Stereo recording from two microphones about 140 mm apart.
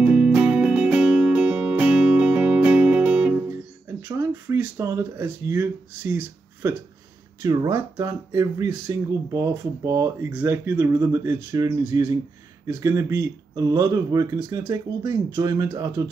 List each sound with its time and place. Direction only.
0.0 s music: 10° right (ahead or behind)
4.0 s speech: 20° right (ahead or behind)